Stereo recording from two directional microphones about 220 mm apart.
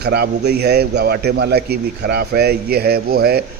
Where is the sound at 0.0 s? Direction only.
45° right (ahead or behind).